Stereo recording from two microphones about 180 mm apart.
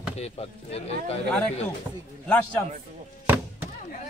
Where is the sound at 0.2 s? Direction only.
35° left (ahead or behind).